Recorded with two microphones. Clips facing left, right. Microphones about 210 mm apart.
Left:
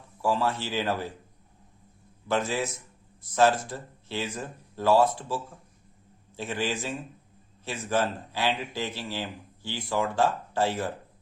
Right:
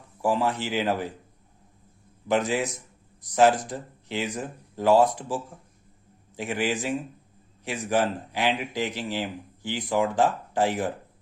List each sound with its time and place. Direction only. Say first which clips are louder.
0.2 s speech: right 2 dB; 15° right (ahead or behind)
2.2 s a man's voice: right 3 dB; 15° right (ahead or behind)